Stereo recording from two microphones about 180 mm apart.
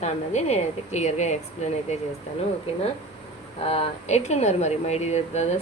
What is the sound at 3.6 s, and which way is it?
A woman's voice, 35° left (ahead or behind).